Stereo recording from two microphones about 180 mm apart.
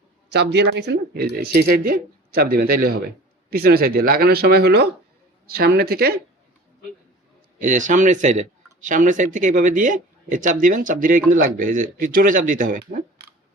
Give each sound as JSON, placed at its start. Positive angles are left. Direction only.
{"t": 0.3, "sound": "speech", "side_deg": -70}
{"t": 7.6, "sound": "speech", "side_deg": -45}